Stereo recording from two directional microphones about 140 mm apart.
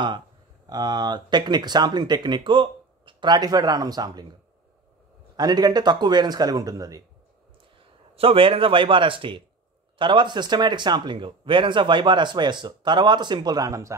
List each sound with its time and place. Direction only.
0.7 s speech: 30° right (ahead or behind)
5.3 s speech: 30° right (ahead or behind)
8.2 s speech: 40° right (ahead or behind); by 13.9 s 25° right (ahead or behind)